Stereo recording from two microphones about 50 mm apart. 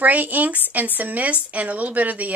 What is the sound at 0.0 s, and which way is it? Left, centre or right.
Speech, right.